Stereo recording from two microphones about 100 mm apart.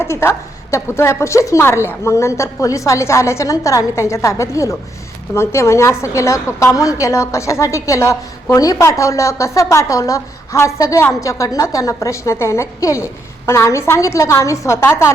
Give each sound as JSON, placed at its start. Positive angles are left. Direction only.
{"t": 0.0, "sound": "a woman's voice", "side_deg": 25}